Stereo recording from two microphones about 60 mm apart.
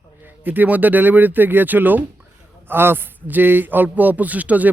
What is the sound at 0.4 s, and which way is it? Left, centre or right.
Speech, right.